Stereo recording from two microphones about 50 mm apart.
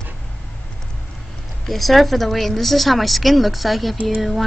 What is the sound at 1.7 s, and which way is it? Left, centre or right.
A woman's voice, centre.